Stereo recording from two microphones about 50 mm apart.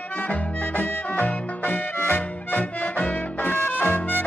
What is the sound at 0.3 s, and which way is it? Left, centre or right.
Music, left.